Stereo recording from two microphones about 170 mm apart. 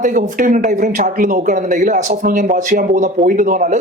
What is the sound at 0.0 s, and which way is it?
Speech, 50° right (ahead or behind).